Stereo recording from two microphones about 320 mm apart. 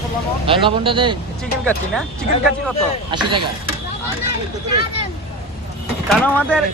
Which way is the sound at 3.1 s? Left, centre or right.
Centre.